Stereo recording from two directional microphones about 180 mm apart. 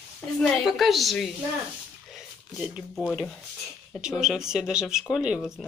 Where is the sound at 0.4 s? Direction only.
Centre (ahead or behind).